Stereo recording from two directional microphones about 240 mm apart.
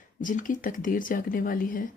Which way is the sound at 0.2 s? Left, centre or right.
Left.